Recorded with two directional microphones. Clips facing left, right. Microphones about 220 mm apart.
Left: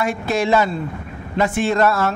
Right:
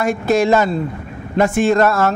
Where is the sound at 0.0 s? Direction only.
45° right (ahead or behind).